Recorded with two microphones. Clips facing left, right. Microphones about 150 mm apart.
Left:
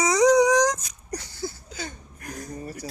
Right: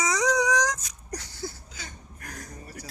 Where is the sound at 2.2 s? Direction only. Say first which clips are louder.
Left 5 dB; 15° left (ahead or behind).